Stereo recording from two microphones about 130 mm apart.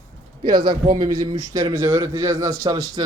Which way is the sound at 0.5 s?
35° right (ahead or behind).